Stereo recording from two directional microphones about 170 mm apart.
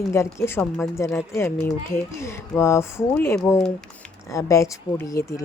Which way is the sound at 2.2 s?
15° left (ahead or behind).